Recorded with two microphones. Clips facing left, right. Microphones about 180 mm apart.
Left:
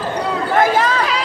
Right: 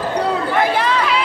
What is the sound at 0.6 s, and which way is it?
Chatter, 45° left (ahead or behind).